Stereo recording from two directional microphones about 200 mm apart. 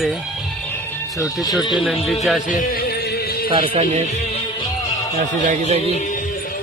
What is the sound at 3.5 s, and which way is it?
Speech, 30° right (ahead or behind).